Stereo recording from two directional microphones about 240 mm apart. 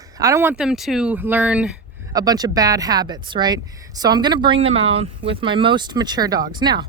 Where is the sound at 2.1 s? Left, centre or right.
Centre.